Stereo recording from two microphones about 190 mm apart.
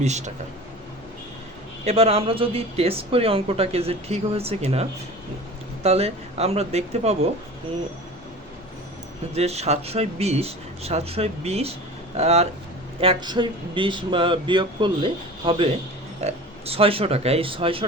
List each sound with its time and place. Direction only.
0.0 s speech: 35° right (ahead or behind)
1.8 s speech: 30° right (ahead or behind)
9.3 s speech: 35° right (ahead or behind)